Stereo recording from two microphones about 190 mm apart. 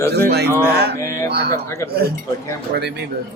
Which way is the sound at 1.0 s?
15° left (ahead or behind).